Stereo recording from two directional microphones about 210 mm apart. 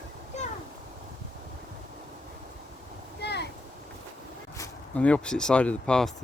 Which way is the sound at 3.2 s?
55° left (ahead or behind).